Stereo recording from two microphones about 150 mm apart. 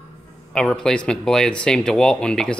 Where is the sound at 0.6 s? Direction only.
5° left (ahead or behind).